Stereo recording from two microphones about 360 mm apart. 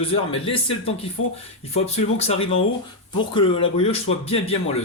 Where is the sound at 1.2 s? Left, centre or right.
Left.